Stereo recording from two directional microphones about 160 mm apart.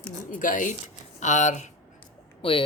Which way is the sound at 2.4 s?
35° left (ahead or behind).